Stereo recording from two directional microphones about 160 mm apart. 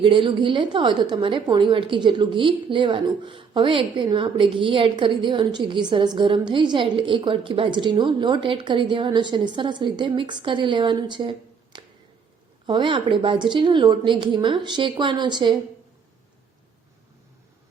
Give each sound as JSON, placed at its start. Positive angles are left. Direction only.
{"t": 0.0, "sound": "a woman's voice", "side_deg": -30}